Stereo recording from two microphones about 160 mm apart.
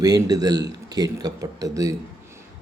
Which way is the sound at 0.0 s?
25° right (ahead or behind).